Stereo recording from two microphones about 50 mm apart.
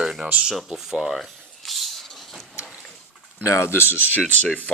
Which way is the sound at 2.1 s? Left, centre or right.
Centre.